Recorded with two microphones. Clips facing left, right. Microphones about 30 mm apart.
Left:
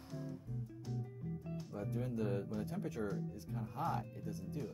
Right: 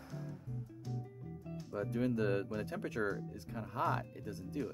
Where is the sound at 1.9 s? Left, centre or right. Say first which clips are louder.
Right 6 dB; right.